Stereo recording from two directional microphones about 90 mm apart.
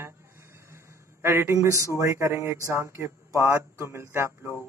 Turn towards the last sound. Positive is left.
turn(degrees=-30)  # may be behind; listen again after turning